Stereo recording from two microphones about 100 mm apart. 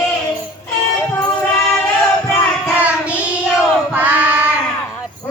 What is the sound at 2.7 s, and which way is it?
Child singing, 15° right (ahead or behind).